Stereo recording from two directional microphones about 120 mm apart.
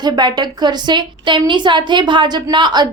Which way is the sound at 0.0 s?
35° right (ahead or behind).